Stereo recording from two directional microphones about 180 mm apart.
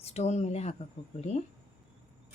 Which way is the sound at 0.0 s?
40° left (ahead or behind).